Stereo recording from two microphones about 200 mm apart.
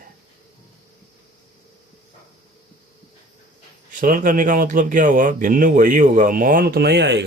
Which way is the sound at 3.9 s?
45° right (ahead or behind).